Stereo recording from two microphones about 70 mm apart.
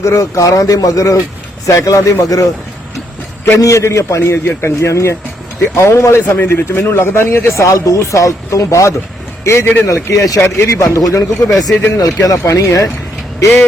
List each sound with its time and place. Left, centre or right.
0.0 s a man's voice: left
3.6 s a man's voice: left
10.4 s speech: left
10.9 s a man's voice: left
11.7 s speech: left
12.2 s a man's voice: left